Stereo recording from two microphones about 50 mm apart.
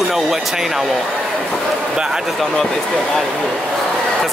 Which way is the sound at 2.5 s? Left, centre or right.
Centre.